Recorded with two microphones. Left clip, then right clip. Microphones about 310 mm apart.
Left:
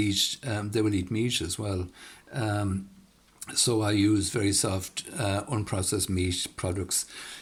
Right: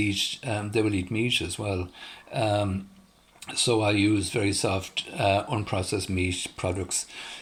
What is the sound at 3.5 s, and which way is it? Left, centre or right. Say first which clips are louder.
Speech: right 3 dB; left.